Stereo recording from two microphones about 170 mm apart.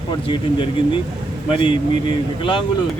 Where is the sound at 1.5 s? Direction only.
30° left (ahead or behind).